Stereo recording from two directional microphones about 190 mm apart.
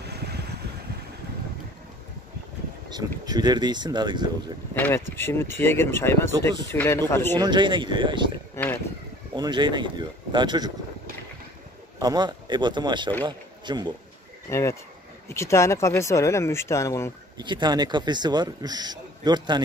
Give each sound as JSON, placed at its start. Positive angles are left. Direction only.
{"t": 0.0, "sound": "vehicle", "side_deg": -60}
{"t": 2.9, "sound": "speech", "side_deg": -20}
{"t": 4.7, "sound": "speech", "side_deg": 10}
{"t": 7.3, "sound": "speech", "side_deg": -25}
{"t": 8.6, "sound": "speech", "side_deg": 15}
{"t": 9.3, "sound": "speech", "side_deg": -25}
{"t": 12.0, "sound": "speech", "side_deg": -20}
{"t": 14.5, "sound": "speech", "side_deg": 15}
{"t": 17.4, "sound": "speech", "side_deg": -25}